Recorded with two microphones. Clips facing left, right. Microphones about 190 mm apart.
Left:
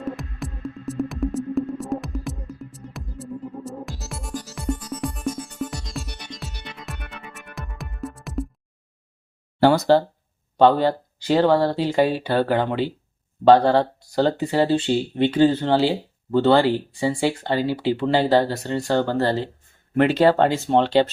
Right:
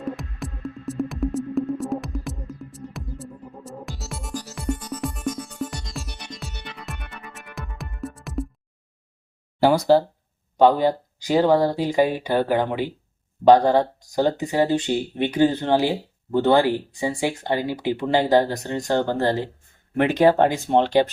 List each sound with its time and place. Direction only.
0.0 s music: centre (ahead or behind)
9.7 s speech: 10° right (ahead or behind)